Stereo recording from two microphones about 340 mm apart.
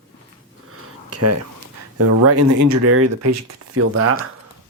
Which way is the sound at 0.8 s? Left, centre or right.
Right.